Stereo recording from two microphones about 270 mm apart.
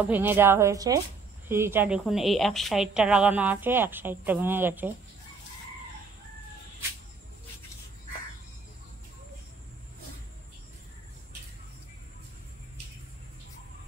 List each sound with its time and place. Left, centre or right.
0.0 s a woman's voice: centre